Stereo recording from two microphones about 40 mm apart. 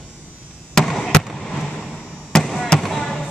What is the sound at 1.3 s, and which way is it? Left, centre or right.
Fireworks, centre.